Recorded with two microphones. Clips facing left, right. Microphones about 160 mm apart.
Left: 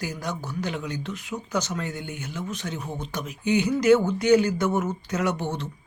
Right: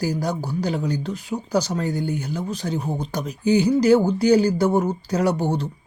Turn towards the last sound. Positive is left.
turn(degrees=-35)  # may be behind; listen again after turning